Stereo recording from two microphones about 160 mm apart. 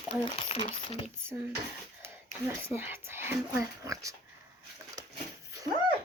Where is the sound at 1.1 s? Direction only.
15° right (ahead or behind).